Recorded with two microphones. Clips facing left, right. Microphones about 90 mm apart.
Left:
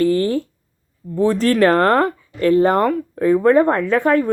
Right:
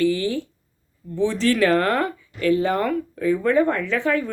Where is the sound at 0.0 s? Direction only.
45° left (ahead or behind).